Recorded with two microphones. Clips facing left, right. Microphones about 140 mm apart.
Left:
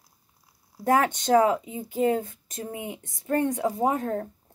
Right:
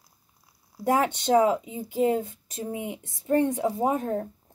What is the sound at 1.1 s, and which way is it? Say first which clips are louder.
A woman's voice: even; 20° right (ahead or behind).